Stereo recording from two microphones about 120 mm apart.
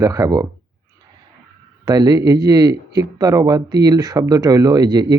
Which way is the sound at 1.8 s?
30° right (ahead or behind).